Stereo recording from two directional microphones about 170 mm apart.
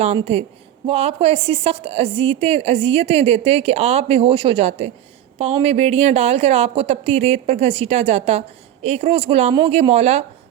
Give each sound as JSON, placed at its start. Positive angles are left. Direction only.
{"t": 0.9, "sound": "a woman's voice", "side_deg": -35}